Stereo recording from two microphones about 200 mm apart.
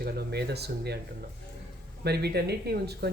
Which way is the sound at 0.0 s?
55° right (ahead or behind).